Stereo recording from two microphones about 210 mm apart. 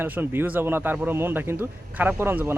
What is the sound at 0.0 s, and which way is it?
Speech, 10° right (ahead or behind).